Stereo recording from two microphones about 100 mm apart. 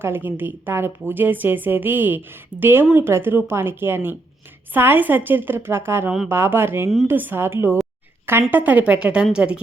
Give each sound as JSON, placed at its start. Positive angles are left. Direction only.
{"t": 0.0, "sound": "a woman's voice", "side_deg": -20}